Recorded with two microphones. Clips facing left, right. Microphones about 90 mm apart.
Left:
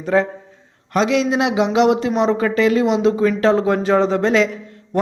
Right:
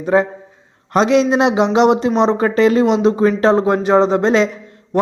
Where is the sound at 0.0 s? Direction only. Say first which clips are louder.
Right 2 dB; 20° right (ahead or behind).